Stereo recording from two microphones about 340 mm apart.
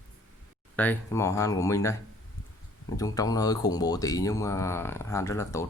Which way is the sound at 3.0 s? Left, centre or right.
Centre.